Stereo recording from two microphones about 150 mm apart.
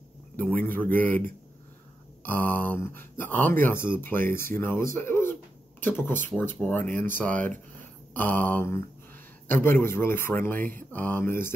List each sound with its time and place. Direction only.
0.4 s speech: 10° left (ahead or behind)